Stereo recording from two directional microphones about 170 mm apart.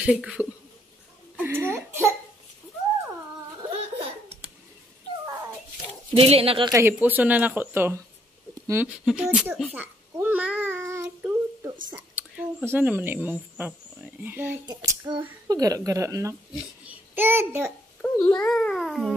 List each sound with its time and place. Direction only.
0.0 s speech: 5° right (ahead or behind)
1.3 s hiccup: 10° right (ahead or behind)
6.1 s speech: 35° right (ahead or behind)
6.7 s speech: 15° right (ahead or behind)
8.6 s babbling: 10° right (ahead or behind)
14.7 s a child's voice: 25° right (ahead or behind)
18.0 s a child's voice: 10° left (ahead or behind)